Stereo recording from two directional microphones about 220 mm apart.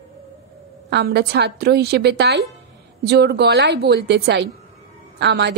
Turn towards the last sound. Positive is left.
turn(degrees=-50)  # may be behind; listen again after turning